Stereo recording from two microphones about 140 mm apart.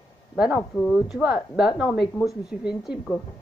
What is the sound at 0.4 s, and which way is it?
Speech, 5° right (ahead or behind).